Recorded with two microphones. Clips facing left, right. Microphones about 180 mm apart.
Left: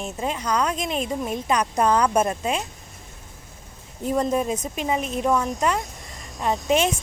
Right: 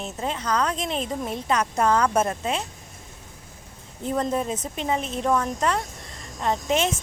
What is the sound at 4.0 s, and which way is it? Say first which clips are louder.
A woman's voice: left 3 dB; 10° left (ahead or behind).